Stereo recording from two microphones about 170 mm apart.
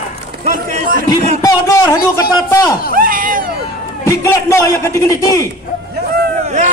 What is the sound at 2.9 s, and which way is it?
Cat, 55° right (ahead or behind).